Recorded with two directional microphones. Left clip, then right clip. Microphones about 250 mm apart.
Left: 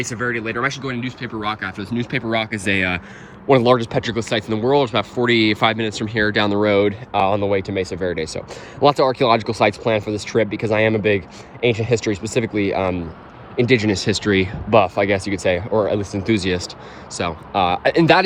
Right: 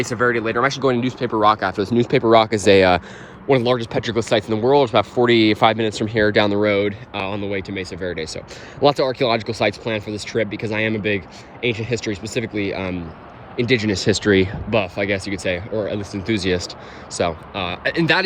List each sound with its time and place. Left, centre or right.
0.0 s speech: centre
3.5 s speech: centre